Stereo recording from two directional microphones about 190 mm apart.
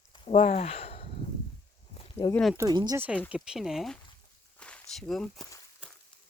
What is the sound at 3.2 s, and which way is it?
Speech, 5° right (ahead or behind).